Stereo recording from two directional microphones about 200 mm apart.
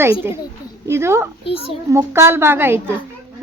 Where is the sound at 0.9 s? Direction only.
15° right (ahead or behind).